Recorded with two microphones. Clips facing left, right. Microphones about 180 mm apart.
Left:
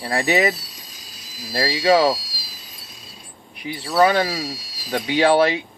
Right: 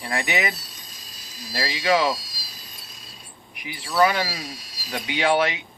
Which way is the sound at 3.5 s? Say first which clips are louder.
Left 5 dB; 30° left (ahead or behind).